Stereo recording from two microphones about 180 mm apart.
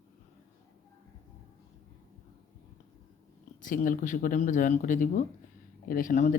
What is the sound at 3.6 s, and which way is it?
Speech, 50° left (ahead or behind).